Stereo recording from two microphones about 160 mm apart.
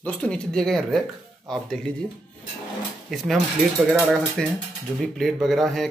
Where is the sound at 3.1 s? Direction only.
Centre (ahead or behind).